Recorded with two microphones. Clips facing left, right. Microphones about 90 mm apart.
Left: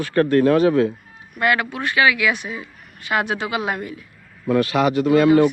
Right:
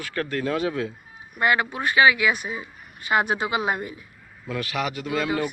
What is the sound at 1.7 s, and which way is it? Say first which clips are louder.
Speech: right 3 dB; 20° right (ahead or behind).